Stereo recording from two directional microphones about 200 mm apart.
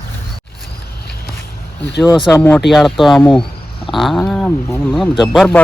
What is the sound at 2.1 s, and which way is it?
Speech, 10° left (ahead or behind).